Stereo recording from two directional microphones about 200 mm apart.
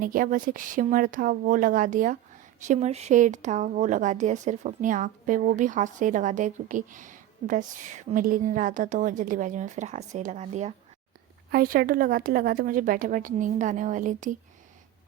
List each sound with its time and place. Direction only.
0.0 s speech: 45° right (ahead or behind)
11.5 s a woman's voice: 45° right (ahead or behind)